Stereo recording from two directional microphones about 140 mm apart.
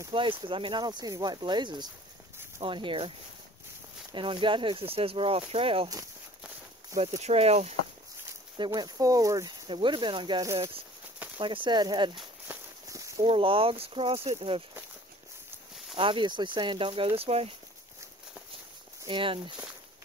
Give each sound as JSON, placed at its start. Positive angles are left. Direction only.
{"t": 0.1, "sound": "speech", "side_deg": -35}
{"t": 4.1, "sound": "speech", "side_deg": -35}
{"t": 7.0, "sound": "speech", "side_deg": -50}
{"t": 8.5, "sound": "speech", "side_deg": -30}
{"t": 9.7, "sound": "speech", "side_deg": -35}
{"t": 12.4, "sound": "walk", "side_deg": -20}
{"t": 13.2, "sound": "speech", "side_deg": -40}
{"t": 16.0, "sound": "speech", "side_deg": -35}
{"t": 19.0, "sound": "speech", "side_deg": -40}